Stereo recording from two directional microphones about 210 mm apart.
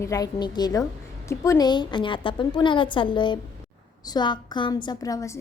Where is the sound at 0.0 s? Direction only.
15° left (ahead or behind).